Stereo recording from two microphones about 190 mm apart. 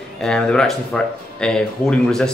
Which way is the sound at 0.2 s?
5° left (ahead or behind).